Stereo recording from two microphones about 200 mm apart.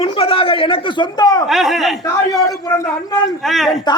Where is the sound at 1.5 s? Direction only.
Centre (ahead or behind).